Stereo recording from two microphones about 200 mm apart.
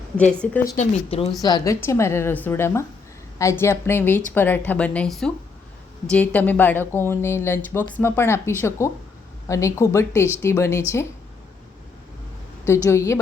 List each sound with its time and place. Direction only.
0.2 s a woman's voice: 5° left (ahead or behind)
0.6 s speech: 35° left (ahead or behind)
1.4 s speech: 20° left (ahead or behind)
12.6 s speech: 15° left (ahead or behind)